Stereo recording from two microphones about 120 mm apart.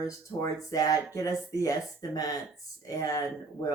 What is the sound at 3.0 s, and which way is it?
Speech, 30° left (ahead or behind).